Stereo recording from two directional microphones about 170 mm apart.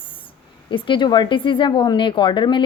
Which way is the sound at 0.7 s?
30° left (ahead or behind).